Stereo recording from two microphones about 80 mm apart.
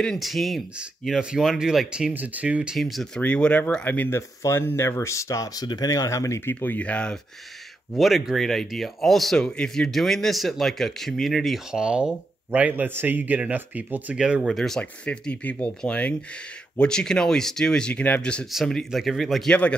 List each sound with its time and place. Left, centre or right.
0.0 s speech: centre
2.1 s speech: centre
2.7 s speech: centre
3.2 s speech: centre
4.1 s speech: left
6.5 s speech: left
7.9 s speech: centre
11.7 s a man's voice: centre
14.1 s speech: centre
14.5 s speech: centre
18.5 s speech: centre
19.5 s speech: centre